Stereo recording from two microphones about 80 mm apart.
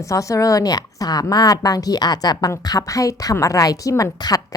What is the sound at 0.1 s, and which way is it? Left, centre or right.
A woman's voice, left.